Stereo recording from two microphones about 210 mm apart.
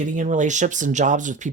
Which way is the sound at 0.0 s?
35° right (ahead or behind).